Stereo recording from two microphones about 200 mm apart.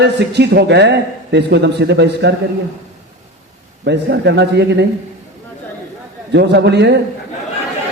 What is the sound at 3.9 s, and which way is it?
A man's voice, 60° right (ahead or behind).